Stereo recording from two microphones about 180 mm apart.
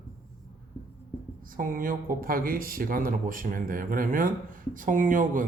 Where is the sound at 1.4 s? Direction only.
50° right (ahead or behind).